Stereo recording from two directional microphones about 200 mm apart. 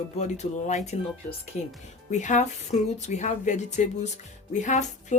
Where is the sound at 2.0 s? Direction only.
40° left (ahead or behind).